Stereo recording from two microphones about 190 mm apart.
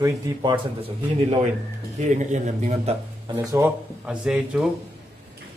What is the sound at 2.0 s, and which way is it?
Speech, 40° right (ahead or behind).